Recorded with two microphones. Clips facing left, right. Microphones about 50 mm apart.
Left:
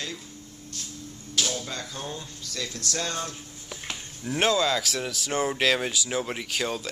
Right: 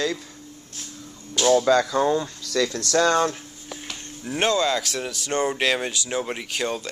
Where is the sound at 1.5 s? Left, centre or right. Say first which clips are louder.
Right 16 dB; right.